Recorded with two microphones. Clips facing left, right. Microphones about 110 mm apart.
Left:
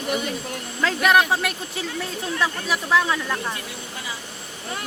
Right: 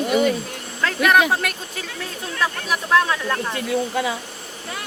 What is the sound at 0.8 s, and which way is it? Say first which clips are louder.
Speech: right 1 dB; centre (ahead or behind).